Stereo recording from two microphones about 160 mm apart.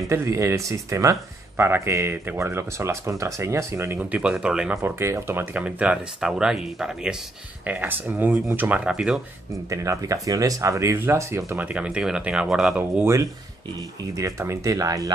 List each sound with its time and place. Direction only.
0.1 s speech: 20° right (ahead or behind)
9.7 s speech: 20° right (ahead or behind); by 13.0 s 5° right (ahead or behind)
13.0 s speech: 20° right (ahead or behind)